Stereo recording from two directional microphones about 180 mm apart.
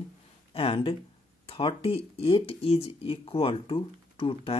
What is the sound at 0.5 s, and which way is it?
Speech, 30° left (ahead or behind).